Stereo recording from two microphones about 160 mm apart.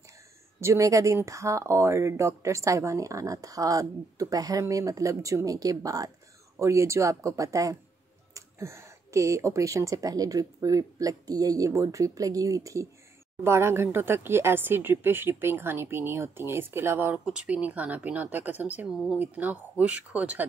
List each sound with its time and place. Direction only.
0.6 s speech: 20° right (ahead or behind)